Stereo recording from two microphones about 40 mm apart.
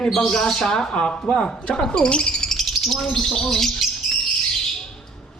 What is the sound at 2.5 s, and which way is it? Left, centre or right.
Speech, centre.